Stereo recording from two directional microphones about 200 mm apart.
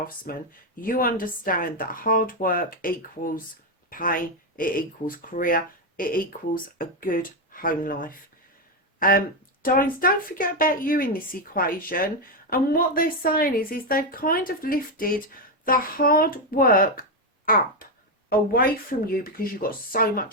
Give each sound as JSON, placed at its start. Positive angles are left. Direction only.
{"t": 0.3, "sound": "speech", "side_deg": 45}